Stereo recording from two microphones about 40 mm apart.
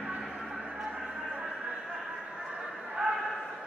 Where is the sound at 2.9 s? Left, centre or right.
Centre.